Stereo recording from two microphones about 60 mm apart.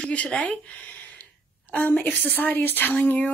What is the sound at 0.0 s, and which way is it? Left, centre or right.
A woman's voice, left.